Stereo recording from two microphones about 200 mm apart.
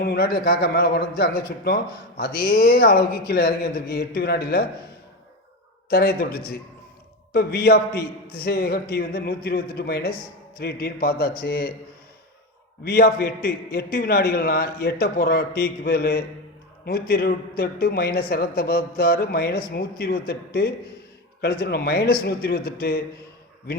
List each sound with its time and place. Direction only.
0.0 s a woman's voice: 50° left (ahead or behind)
5.9 s a woman's voice: 50° left (ahead or behind)
12.8 s a woman's voice: 50° left (ahead or behind)